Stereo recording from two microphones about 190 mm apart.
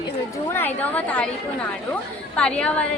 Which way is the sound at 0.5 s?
10° left (ahead or behind).